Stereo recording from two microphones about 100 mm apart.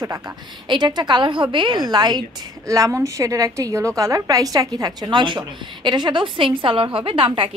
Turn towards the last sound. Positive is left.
turn(degrees=-60)  # may be behind; listen again after turning